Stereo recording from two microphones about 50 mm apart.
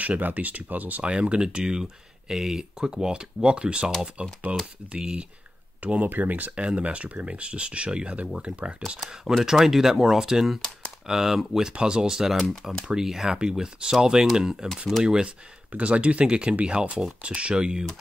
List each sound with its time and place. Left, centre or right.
0.0 s speech: right
1.0 s speech: centre
6.0 s speech: right
6.5 s speech: right
9.1 s speech: centre